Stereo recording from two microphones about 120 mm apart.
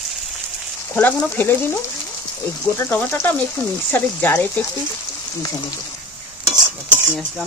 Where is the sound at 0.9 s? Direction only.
15° left (ahead or behind).